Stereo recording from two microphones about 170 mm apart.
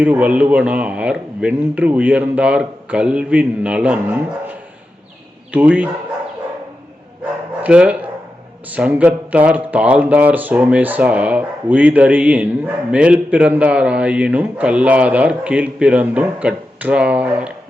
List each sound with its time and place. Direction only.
0.0 s a man's voice: 10° right (ahead or behind)
7.6 s speech: 5° right (ahead or behind)